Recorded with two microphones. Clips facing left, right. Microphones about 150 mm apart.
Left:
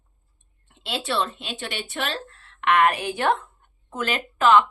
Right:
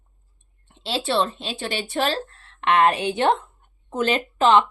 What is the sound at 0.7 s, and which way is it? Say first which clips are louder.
A woman's voice: right 4 dB; 30° right (ahead or behind).